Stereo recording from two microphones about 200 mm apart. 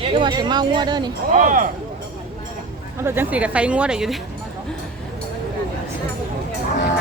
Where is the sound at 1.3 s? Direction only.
40° right (ahead or behind).